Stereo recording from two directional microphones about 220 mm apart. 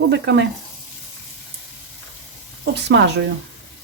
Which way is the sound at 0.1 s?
50° right (ahead or behind).